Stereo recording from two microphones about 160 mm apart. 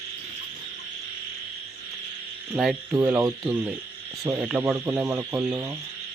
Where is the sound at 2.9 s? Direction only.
15° right (ahead or behind).